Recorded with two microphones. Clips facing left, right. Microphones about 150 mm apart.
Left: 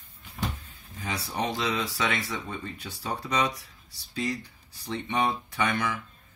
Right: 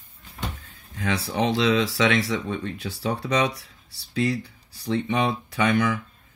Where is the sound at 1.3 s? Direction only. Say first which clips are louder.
Right 7 dB; 85° right.